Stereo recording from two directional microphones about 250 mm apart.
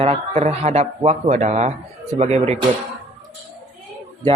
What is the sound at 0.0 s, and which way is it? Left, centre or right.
A man's voice, right.